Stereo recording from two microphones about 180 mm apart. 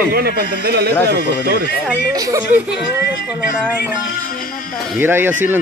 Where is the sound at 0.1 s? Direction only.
55° right (ahead or behind).